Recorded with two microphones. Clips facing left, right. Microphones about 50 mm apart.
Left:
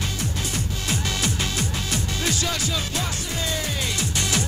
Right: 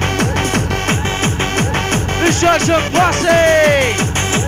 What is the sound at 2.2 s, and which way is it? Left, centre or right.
Speech, right.